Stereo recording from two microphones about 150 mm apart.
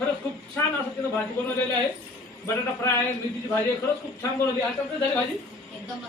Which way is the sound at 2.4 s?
15° left (ahead or behind).